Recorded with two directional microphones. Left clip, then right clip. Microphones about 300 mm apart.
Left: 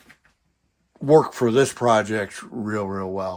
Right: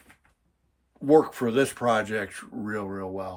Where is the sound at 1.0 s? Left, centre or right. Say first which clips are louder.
Left 4 dB; centre.